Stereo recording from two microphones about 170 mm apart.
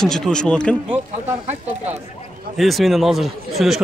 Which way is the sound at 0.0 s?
5° left (ahead or behind).